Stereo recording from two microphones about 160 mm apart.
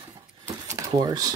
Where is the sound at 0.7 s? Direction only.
25° right (ahead or behind).